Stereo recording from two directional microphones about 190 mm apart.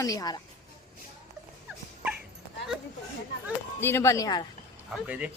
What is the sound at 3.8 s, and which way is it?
Speech, 15° left (ahead or behind).